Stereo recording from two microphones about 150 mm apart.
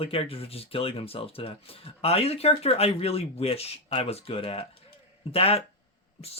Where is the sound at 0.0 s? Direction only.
40° left (ahead or behind).